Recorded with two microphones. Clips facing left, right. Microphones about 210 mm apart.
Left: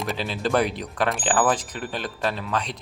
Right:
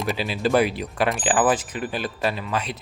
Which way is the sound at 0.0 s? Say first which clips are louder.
Right 3 dB; 5° right (ahead or behind).